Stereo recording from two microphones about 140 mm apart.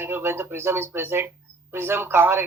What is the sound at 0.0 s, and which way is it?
Speech, 15° right (ahead or behind).